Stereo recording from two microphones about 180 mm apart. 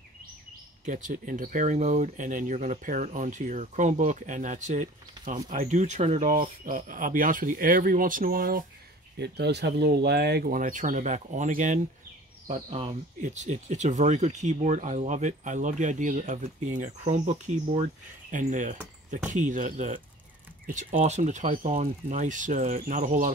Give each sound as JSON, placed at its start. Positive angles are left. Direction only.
{"t": 0.8, "sound": "speech", "side_deg": -45}
{"t": 9.2, "sound": "speech", "side_deg": -70}
{"t": 12.6, "sound": "speech", "side_deg": -30}
{"t": 13.2, "sound": "speech", "side_deg": -40}